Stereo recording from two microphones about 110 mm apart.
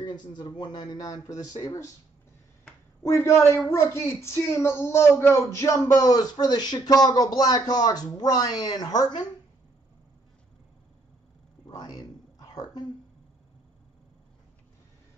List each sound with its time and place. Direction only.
0.0 s speech: 45° left (ahead or behind)
3.0 s a woman's voice: 25° left (ahead or behind)
11.7 s a sound: 40° left (ahead or behind)